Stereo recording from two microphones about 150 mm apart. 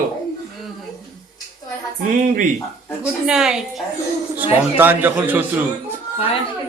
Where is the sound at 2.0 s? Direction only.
65° right (ahead or behind).